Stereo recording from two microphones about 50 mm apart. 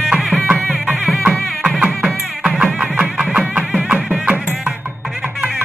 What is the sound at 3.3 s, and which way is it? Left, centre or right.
Music, right.